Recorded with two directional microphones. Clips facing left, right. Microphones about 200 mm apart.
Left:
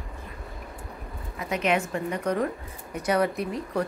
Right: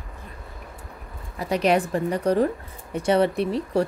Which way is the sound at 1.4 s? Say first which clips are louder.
Right 5 dB; 35° right (ahead or behind).